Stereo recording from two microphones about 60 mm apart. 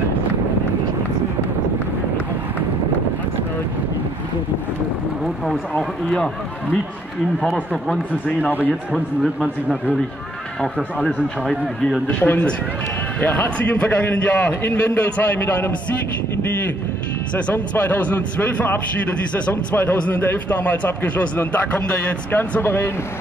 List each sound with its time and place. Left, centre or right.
5.2 s a sound: centre
6.0 s speech: centre
8.5 s a man's voice: right
8.9 s a man's voice: centre
12.1 s a man's voice: left
17.7 s a man's voice: left
22.0 s a man's voice: left